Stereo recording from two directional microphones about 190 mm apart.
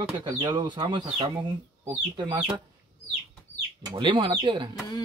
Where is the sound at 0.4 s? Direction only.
20° right (ahead or behind).